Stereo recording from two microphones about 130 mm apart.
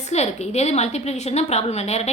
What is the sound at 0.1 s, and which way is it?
A woman's voice, 55° left (ahead or behind).